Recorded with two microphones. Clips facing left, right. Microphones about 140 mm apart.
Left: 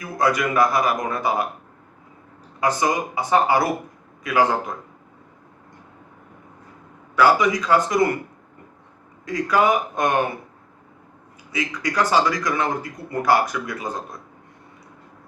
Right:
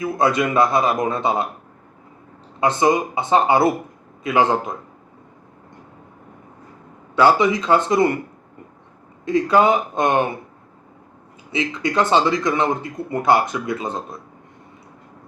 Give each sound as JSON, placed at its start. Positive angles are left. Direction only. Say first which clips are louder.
{"t": 0.0, "sound": "speech", "louder": "right 3 dB", "side_deg": -25}
{"t": 2.6, "sound": "speech", "louder": "right 4 dB", "side_deg": -25}
{"t": 7.2, "sound": "speech", "louder": "right 2 dB", "side_deg": -25}
{"t": 9.2, "sound": "speech", "louder": "right 4 dB", "side_deg": -25}
{"t": 11.5, "sound": "speech", "louder": "right 3 dB", "side_deg": -25}